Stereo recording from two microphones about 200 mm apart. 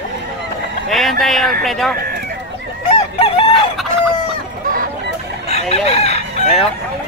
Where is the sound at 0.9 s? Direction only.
Centre (ahead or behind).